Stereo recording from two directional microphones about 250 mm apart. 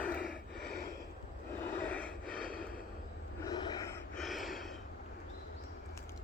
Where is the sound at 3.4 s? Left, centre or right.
Centre.